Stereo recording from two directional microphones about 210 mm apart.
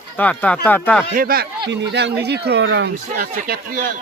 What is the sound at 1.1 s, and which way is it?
Speech, 45° right (ahead or behind).